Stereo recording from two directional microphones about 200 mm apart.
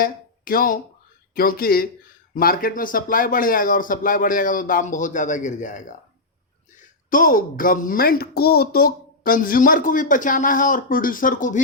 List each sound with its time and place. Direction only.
0.0 s a woman's voice: 45° left (ahead or behind)